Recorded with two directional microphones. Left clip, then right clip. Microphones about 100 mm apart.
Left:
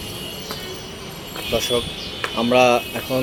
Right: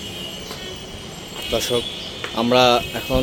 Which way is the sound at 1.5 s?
45° right (ahead or behind).